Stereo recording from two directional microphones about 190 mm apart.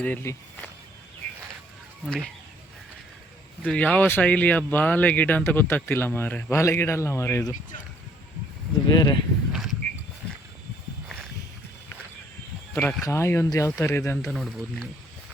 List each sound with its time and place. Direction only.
0.0 s speech: 10° left (ahead or behind)
2.0 s speech: 5° left (ahead or behind)
3.6 s speech: 5° left (ahead or behind)
8.9 s speech: 20° left (ahead or behind)
9.5 s a sound: centre (ahead or behind)
12.7 s speech: 10° left (ahead or behind)
14.3 s speech: centre (ahead or behind)